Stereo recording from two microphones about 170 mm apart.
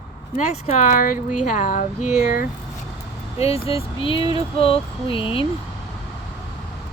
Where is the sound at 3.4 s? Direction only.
35° left (ahead or behind).